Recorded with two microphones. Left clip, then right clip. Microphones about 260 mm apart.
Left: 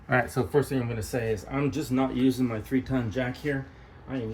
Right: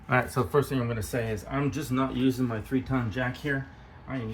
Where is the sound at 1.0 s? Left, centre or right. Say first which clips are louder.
Left 2 dB; right.